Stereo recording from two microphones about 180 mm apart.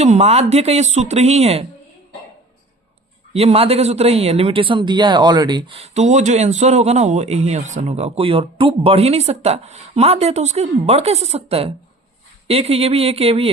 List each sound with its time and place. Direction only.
0.0 s speech: 40° right (ahead or behind)
3.3 s speech: 35° right (ahead or behind)